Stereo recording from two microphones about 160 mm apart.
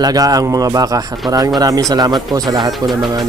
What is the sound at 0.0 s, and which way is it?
Speech, 25° right (ahead or behind).